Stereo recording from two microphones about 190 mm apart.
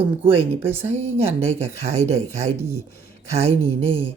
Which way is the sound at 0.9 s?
35° right (ahead or behind).